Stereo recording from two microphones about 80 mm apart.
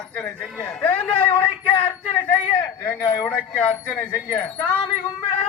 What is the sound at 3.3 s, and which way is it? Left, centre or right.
Speech, centre.